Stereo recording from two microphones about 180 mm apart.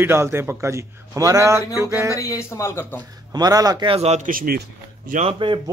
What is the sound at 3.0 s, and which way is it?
A man's voice, 20° right (ahead or behind).